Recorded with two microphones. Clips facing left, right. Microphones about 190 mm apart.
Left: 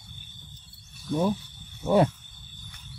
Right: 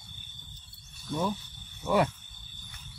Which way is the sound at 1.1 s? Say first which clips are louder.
Left 5 dB; 30° left (ahead or behind).